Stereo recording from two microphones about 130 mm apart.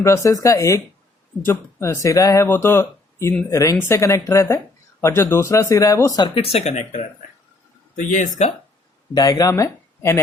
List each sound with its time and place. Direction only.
0.0 s speech: 20° left (ahead or behind); by 7.0 s 55° left (ahead or behind)
7.9 s speech: 75° left (ahead or behind)
9.1 s speech: 30° left (ahead or behind)